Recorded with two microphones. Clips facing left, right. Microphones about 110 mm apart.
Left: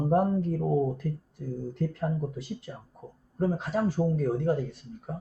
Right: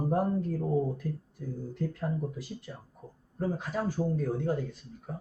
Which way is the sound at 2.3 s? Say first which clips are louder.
Left 4 dB; 65° left (ahead or behind).